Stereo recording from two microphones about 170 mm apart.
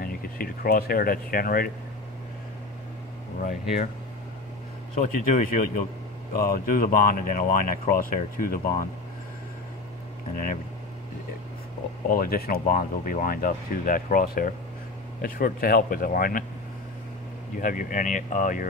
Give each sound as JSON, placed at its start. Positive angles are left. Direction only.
{"t": 0.0, "sound": "speech", "side_deg": 60}
{"t": 5.0, "sound": "speech", "side_deg": 50}
{"t": 10.3, "sound": "speech", "side_deg": 55}
{"t": 12.1, "sound": "speech", "side_deg": 60}
{"t": 17.6, "sound": "speech", "side_deg": 50}